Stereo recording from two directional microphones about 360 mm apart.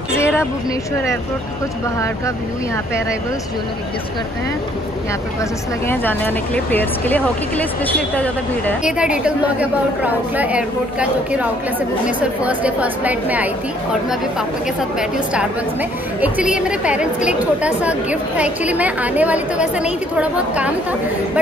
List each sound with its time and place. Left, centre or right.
0.2 s a sound: centre
5.9 s speech: centre
15.0 s speech: centre